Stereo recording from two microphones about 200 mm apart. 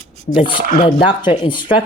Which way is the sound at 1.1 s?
25° left (ahead or behind).